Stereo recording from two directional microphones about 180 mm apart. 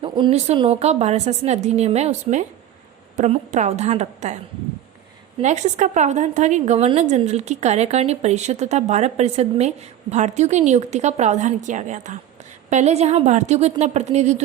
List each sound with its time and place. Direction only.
0.0 s a woman's voice: 30° right (ahead or behind)
5.4 s a woman's voice: 40° right (ahead or behind)